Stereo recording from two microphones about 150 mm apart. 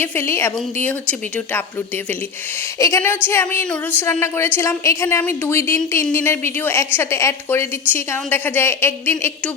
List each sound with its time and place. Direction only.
0.0 s a woman's voice: 15° left (ahead or behind)
2.7 s a woman's voice: 20° left (ahead or behind)